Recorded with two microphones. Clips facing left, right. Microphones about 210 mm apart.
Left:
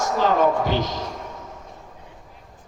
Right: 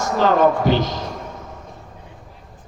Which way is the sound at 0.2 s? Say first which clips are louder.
Right 4 dB; 70° right (ahead or behind).